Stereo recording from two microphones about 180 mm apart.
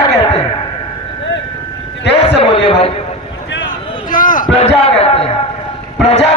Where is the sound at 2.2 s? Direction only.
30° left (ahead or behind).